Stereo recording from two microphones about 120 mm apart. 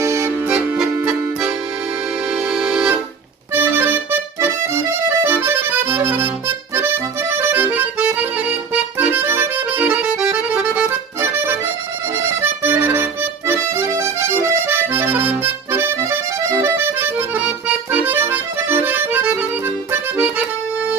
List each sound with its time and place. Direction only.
0.0 s music: 25° right (ahead or behind)
0.8 s accordion: 5° right (ahead or behind)
2.3 s music: centre (ahead or behind)
3.5 s accordion: 15° right (ahead or behind)